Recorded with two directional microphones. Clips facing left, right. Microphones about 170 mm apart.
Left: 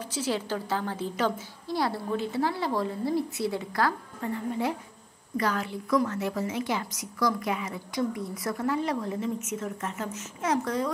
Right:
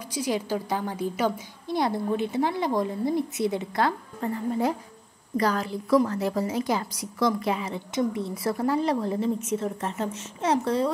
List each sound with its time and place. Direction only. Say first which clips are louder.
0.1 s a woman's voice: right 3 dB; 15° right (ahead or behind)
4.2 s a woman's voice: right 4 dB; 40° right (ahead or behind)